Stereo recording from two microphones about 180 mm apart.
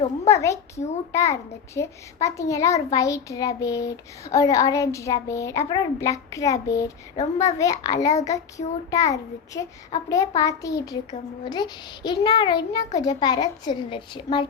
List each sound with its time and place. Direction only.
0.3 s a child's voice: 15° left (ahead or behind)
8.1 s child singing: 40° left (ahead or behind)
8.5 s a child's voice: 20° left (ahead or behind)